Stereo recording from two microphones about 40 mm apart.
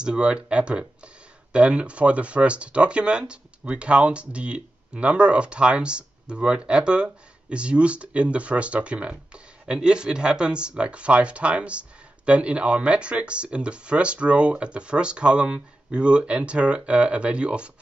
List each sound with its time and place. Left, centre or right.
0.0 s speech: right